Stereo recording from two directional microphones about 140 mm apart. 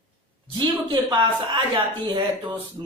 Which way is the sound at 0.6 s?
35° right (ahead or behind).